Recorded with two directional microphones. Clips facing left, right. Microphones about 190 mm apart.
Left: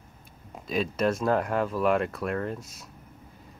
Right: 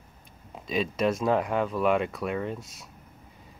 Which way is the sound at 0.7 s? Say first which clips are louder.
Even; centre (ahead or behind).